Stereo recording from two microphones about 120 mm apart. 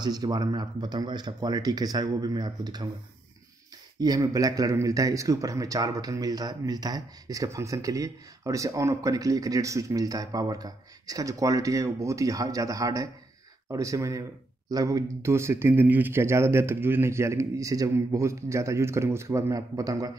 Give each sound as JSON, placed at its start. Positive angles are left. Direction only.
{"t": 0.0, "sound": "speech", "side_deg": -35}
{"t": 4.0, "sound": "a man's voice", "side_deg": -30}